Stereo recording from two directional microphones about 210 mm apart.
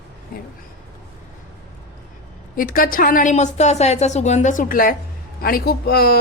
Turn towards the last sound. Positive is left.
turn(degrees=45)  # may be behind; listen again after turning